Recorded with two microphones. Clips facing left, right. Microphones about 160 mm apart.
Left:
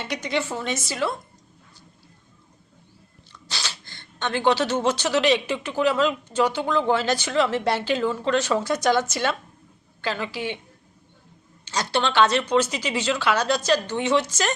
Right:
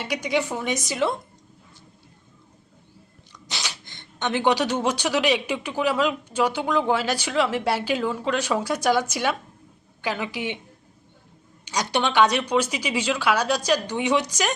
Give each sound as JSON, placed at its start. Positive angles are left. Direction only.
{"t": 0.0, "sound": "speech", "side_deg": -10}
{"t": 3.3, "sound": "speech", "side_deg": -15}
{"t": 11.6, "sound": "speech", "side_deg": -15}